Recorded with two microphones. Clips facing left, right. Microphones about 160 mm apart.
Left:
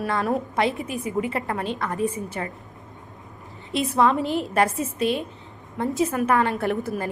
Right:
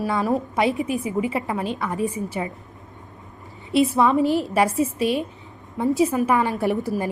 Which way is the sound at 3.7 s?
Centre (ahead or behind).